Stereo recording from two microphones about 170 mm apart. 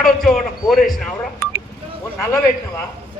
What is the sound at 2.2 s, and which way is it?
Speech, 15° left (ahead or behind).